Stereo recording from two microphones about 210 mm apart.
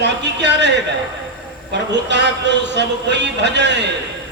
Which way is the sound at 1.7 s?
55° right (ahead or behind).